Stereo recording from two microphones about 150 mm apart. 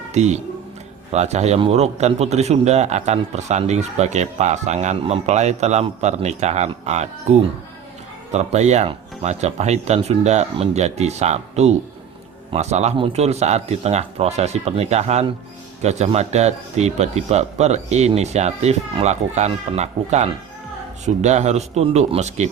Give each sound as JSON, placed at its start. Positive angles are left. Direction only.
{"t": 0.1, "sound": "a man's voice", "side_deg": -50}